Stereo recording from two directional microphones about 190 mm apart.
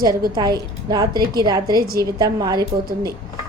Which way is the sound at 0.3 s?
20° right (ahead or behind).